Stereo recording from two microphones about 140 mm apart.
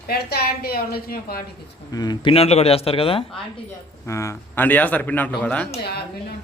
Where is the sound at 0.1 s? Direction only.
90° left.